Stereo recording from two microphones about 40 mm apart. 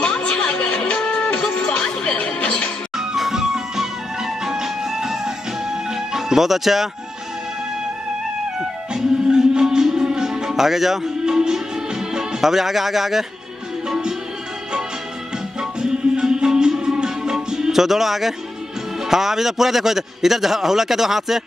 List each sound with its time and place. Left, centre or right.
0.0 s music: left
3.0 s music: centre
8.5 s music: centre
12.4 s a man's voice: centre
13.8 s music: centre
15.8 s music: centre
19.0 s a man's voice: centre